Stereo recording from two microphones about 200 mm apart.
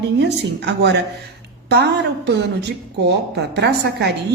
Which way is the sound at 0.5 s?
60° right (ahead or behind).